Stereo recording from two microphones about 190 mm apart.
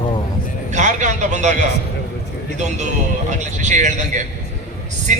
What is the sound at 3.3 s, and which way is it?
A man's voice, 40° right (ahead or behind).